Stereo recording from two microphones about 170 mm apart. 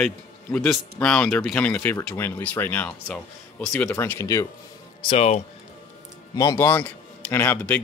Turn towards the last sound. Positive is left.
turn(degrees=10)  # may be behind; listen again after turning